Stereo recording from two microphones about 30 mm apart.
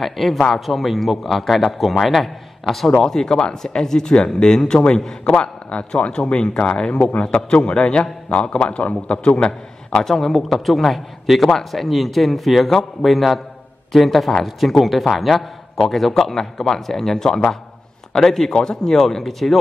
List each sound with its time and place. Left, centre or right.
0.0 s a man's voice: centre; by 9.9 s left
10.0 s a man's voice: centre
18.9 s a man's voice: centre